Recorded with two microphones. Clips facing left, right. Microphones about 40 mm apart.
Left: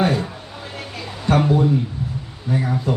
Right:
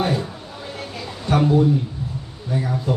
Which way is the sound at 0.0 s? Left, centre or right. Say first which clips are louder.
Left 3 dB; centre.